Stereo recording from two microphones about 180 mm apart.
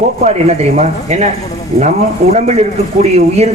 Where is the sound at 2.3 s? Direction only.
35° right (ahead or behind).